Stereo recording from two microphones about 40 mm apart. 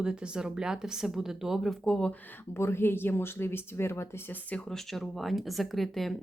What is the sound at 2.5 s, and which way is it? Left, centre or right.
Speech, left.